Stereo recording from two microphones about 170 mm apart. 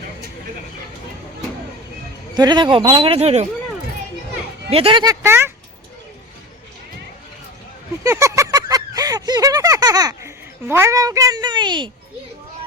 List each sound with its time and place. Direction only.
2.3 s speech: 25° right (ahead or behind)
4.7 s speech: 30° right (ahead or behind)
5.2 s speech: 15° right (ahead or behind)
8.0 s a sound: 15° right (ahead or behind)